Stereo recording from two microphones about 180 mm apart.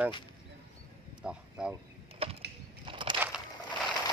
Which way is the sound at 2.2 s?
35° right (ahead or behind).